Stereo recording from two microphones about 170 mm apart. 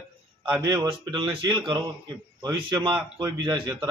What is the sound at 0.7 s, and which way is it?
Speech, 30° right (ahead or behind).